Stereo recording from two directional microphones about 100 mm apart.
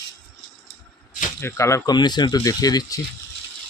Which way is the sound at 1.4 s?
25° left (ahead or behind).